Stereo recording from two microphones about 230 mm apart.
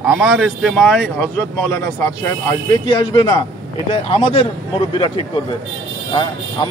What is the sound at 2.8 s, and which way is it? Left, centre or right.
Speech, centre.